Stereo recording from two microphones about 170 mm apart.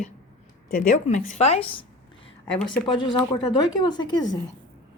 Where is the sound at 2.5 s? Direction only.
10° left (ahead or behind).